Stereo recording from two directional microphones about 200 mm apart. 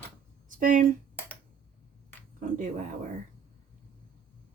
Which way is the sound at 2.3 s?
40° right (ahead or behind).